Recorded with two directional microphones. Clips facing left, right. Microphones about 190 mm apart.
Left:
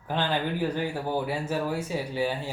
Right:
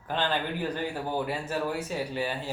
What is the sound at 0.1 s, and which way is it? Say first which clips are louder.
Speech: left 2 dB; 15° left (ahead or behind).